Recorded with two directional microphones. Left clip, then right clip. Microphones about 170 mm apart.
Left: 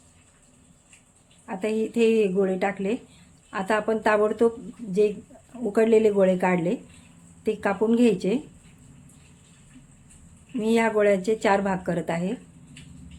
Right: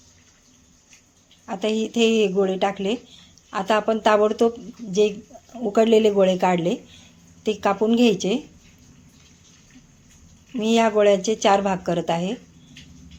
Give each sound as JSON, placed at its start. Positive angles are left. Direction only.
{"t": 1.5, "sound": "speech", "side_deg": -15}
{"t": 10.6, "sound": "speech", "side_deg": -15}